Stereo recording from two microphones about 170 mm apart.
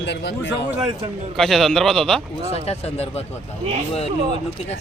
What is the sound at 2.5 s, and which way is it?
Speech, 35° left (ahead or behind).